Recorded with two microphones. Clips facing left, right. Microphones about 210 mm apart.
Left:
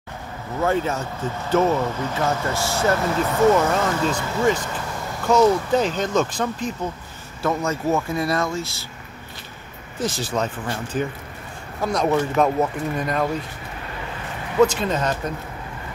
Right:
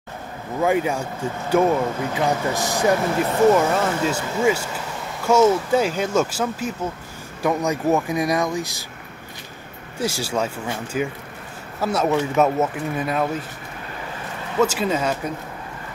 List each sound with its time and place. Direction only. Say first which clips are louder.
0.6 s speech: right 2 dB; 15° right (ahead or behind)
9.9 s speech: right 1 dB; 10° right (ahead or behind)
14.6 s speech: left 2 dB; 5° right (ahead or behind)